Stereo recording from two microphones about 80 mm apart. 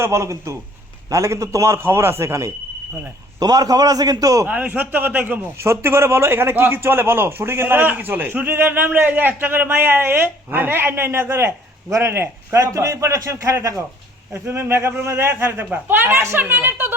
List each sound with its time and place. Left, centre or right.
0.0 s speech: right
3.4 s a man's voice: right
4.4 s a man's voice: centre
5.5 s a man's voice: right